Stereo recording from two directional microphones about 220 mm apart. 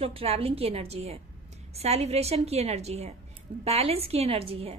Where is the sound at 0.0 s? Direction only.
25° right (ahead or behind).